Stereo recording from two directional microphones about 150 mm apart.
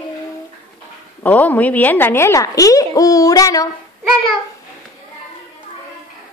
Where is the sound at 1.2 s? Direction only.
10° left (ahead or behind).